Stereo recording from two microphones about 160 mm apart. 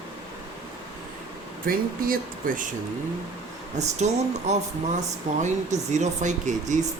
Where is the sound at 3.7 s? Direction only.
45° right (ahead or behind).